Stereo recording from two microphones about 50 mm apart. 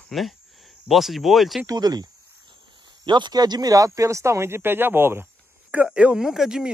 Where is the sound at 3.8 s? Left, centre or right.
Right.